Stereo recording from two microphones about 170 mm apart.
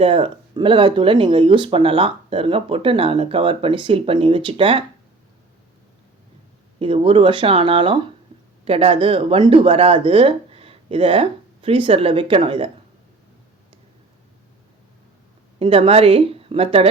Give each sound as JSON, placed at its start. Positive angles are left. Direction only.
{"t": 0.0, "sound": "speech", "side_deg": -30}
{"t": 6.7, "sound": "speech", "side_deg": -35}
{"t": 15.5, "sound": "speech", "side_deg": -35}